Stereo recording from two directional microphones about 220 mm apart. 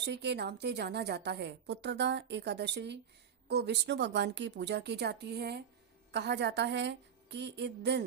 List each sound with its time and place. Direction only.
0.0 s a woman's voice: 50° right (ahead or behind)